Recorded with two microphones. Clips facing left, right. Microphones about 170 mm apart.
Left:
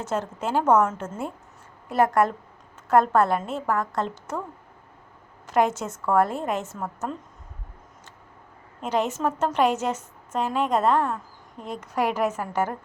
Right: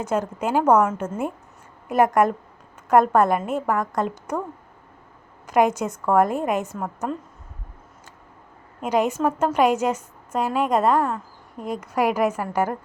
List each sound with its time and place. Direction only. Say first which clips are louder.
0.0 s a woman's voice: right 4 dB; 15° right (ahead or behind)
5.5 s a woman's voice: right 3 dB; 15° right (ahead or behind)
8.8 s a woman's voice: right 4 dB; 10° right (ahead or behind)